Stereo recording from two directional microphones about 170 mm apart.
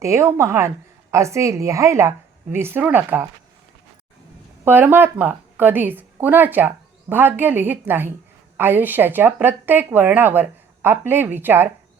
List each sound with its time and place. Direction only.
0.0 s a woman's voice: 15° right (ahead or behind)
4.6 s a woman's voice: 10° right (ahead or behind)